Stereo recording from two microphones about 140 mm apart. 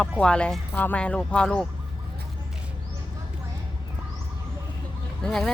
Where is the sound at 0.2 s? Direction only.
5° left (ahead or behind).